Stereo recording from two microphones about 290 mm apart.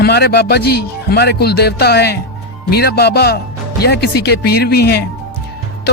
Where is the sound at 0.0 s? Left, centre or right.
Left.